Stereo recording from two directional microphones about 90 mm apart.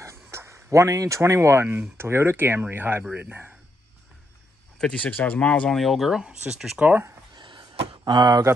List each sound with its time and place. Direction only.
0.0 s speech: 30° right (ahead or behind)
4.7 s speech: 10° left (ahead or behind); by 6.8 s 5° right (ahead or behind)
6.8 s speech: 25° right (ahead or behind)
7.3 s a sound: 55° right (ahead or behind)